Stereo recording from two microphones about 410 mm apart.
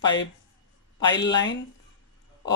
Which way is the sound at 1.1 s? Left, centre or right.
Left.